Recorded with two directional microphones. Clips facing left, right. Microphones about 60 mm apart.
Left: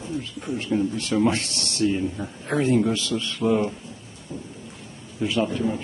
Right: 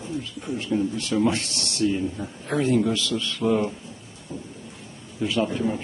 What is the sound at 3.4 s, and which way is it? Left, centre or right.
Speech, centre.